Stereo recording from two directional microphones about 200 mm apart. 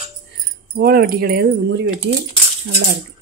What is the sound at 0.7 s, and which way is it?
Speech, 50° right (ahead or behind).